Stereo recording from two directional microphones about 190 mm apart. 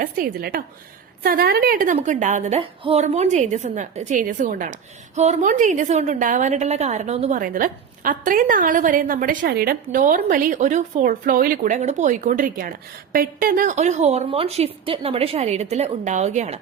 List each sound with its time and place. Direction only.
0.0 s a woman's voice: 50° right (ahead or behind)